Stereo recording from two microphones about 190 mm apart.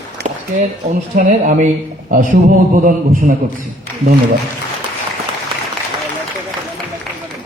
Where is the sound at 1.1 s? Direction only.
40° right (ahead or behind).